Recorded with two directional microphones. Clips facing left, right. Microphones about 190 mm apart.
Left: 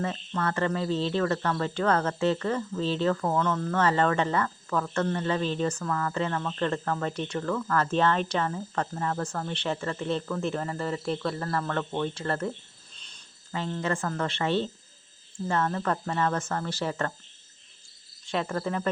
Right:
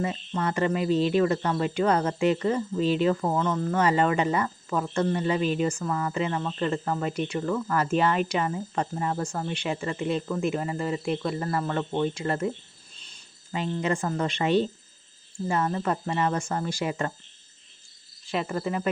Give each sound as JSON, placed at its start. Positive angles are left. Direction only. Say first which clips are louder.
{"t": 0.0, "sound": "speech", "louder": "right 2 dB", "side_deg": -15}
{"t": 18.3, "sound": "speech", "louder": "right 1 dB", "side_deg": -5}